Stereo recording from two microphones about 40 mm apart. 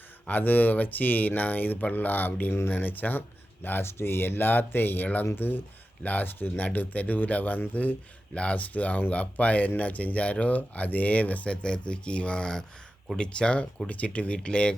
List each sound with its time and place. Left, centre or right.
0.3 s speech: left
2.5 s speech: left
5.2 s speech: left
6.1 s speech: left
11.4 s speech: left
13.8 s speech: left